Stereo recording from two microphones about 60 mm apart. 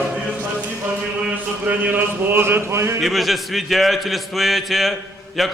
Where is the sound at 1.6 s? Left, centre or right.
Right.